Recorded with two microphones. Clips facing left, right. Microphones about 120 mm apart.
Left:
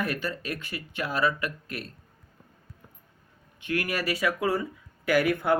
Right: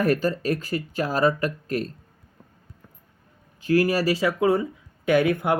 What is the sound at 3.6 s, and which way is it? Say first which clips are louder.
Speech: right 9 dB; 35° right (ahead or behind).